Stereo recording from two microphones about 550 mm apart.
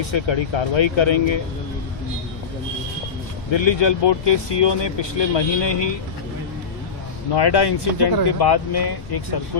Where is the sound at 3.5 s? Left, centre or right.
Left.